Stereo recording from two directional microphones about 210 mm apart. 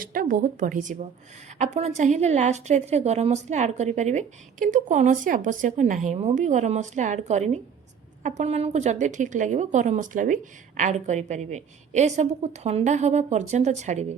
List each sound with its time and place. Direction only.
0.0 s a woman's voice: 40° right (ahead or behind)